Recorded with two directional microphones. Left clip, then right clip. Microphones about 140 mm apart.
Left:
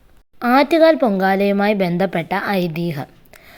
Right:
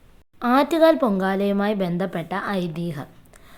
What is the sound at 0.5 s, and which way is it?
A woman's voice, 20° left (ahead or behind).